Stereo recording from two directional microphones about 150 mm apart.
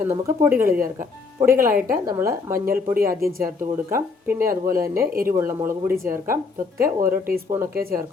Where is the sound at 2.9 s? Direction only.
75° right (ahead or behind).